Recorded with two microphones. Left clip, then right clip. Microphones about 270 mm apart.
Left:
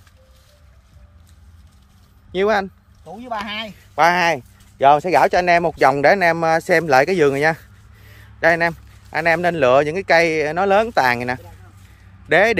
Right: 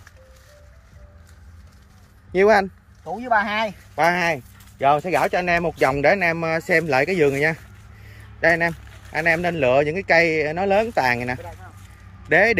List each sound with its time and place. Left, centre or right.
2.3 s speech: centre
3.9 s speech: centre
6.4 s speech: left
7.2 s speech: centre